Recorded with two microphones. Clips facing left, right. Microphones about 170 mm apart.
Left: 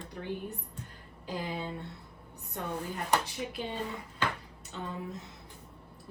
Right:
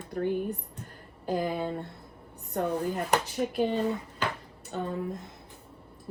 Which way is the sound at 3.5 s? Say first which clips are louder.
Right 13 dB; 55° right (ahead or behind).